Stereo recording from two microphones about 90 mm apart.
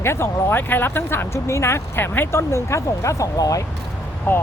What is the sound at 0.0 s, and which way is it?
Speech, 30° left (ahead or behind).